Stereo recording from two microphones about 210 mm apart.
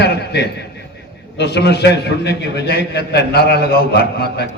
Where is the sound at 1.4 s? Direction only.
55° left (ahead or behind).